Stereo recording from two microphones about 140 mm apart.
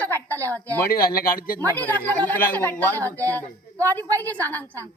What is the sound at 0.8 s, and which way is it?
Speech, 90° left.